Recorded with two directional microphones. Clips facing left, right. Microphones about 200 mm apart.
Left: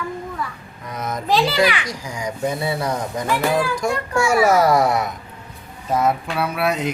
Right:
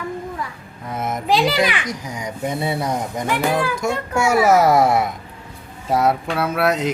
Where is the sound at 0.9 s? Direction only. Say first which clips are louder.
Right 1 dB; 25° right (ahead or behind).